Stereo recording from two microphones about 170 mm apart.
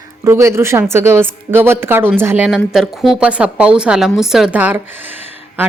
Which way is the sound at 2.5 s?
Centre (ahead or behind).